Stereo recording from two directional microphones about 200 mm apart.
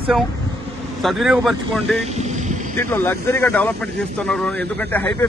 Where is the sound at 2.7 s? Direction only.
10° left (ahead or behind).